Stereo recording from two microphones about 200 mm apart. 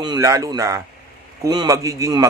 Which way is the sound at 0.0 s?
20° right (ahead or behind).